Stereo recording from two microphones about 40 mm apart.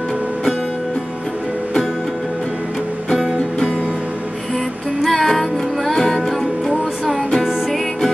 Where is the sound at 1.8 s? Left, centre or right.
Centre.